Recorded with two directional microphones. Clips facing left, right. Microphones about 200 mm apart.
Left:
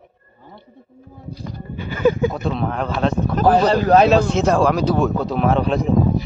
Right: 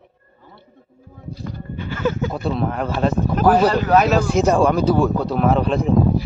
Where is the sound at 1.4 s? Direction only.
15° left (ahead or behind).